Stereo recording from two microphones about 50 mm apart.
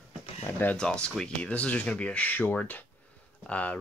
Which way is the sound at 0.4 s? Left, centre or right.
Left.